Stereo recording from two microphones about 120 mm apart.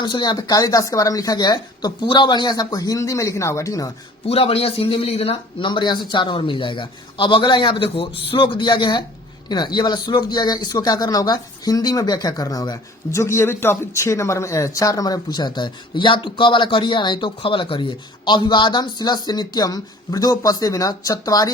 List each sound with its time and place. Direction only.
0.0 s speech: 40° left (ahead or behind)
4.3 s speech: 55° left (ahead or behind); by 21.5 s 30° left (ahead or behind)